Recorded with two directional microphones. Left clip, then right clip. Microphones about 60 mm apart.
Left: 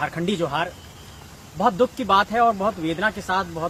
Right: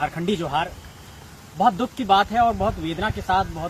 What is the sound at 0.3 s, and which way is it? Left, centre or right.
Speech, left.